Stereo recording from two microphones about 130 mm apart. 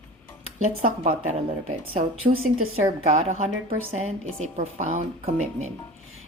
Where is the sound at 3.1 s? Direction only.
60° right (ahead or behind).